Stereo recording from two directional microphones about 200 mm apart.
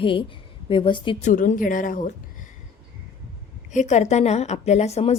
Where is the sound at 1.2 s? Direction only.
40° left (ahead or behind).